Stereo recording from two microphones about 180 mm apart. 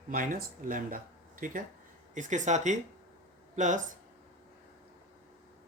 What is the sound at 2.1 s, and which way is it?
Speech, 45° right (ahead or behind).